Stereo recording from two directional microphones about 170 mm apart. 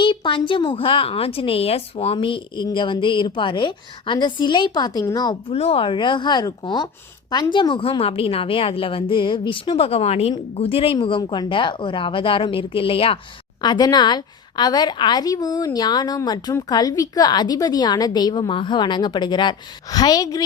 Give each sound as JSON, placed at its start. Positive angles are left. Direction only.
{"t": 0.0, "sound": "a woman's voice", "side_deg": 30}
{"t": 5.5, "sound": "a woman's voice", "side_deg": 35}